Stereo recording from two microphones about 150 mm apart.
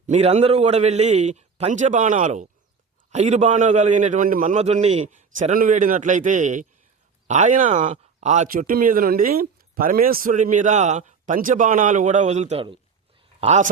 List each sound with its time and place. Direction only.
0.1 s a man's voice: 45° right (ahead or behind)
8.4 s speech: 70° right (ahead or behind); by 13.7 s 50° right (ahead or behind)